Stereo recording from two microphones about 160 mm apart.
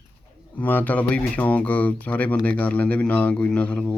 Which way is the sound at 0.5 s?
10° left (ahead or behind).